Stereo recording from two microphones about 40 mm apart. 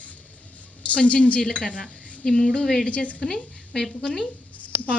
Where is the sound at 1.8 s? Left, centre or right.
Right.